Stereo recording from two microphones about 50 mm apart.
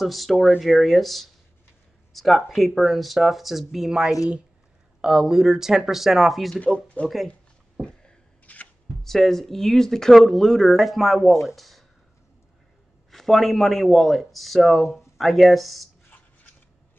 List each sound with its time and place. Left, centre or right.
0.0 s speech: centre
6.5 s speech: left
8.5 s shuffling cards: left
9.0 s speech: centre
10.8 s speech: centre
13.1 s speech: centre